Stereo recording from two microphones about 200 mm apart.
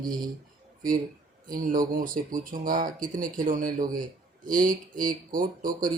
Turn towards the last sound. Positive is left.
turn(degrees=-45)  # may be behind; listen again after turning